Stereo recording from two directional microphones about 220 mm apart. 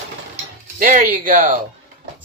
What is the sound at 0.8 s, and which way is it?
Speech, 35° right (ahead or behind).